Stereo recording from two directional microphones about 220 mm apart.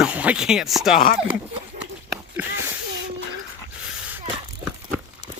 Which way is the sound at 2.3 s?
10° right (ahead or behind).